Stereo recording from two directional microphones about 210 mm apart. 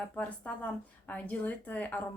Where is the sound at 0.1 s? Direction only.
5° left (ahead or behind).